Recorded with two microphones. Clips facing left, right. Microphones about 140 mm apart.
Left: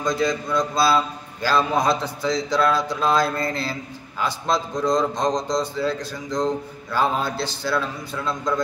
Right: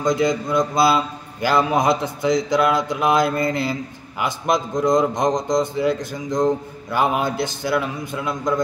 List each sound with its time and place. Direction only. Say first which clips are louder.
0.0 s a man's voice: right 3 dB; 20° right (ahead or behind)